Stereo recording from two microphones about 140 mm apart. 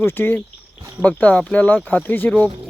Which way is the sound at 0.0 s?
15° left (ahead or behind).